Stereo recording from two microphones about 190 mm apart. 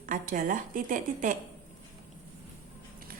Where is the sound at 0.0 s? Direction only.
45° right (ahead or behind).